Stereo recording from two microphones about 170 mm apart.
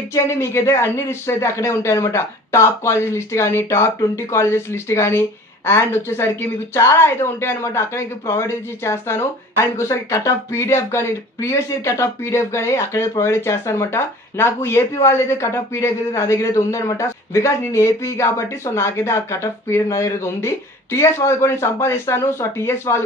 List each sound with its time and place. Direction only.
0.1 s a woman's voice: 15° left (ahead or behind)